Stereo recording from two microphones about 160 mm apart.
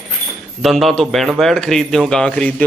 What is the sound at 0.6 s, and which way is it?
A man's voice, centre (ahead or behind).